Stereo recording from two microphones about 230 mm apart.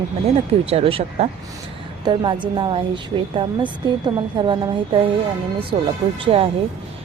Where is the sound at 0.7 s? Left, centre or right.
Right.